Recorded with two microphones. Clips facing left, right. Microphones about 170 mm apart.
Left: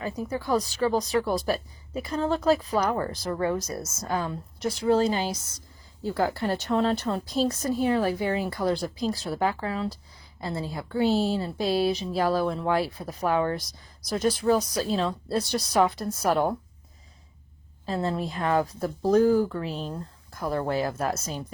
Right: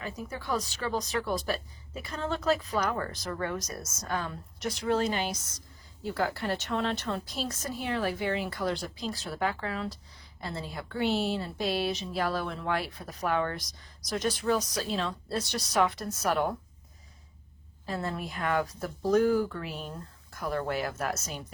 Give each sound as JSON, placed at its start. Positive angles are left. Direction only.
{"t": 0.0, "sound": "speech", "side_deg": 35}
{"t": 3.0, "sound": "speech", "side_deg": 25}
{"t": 17.9, "sound": "speech", "side_deg": 30}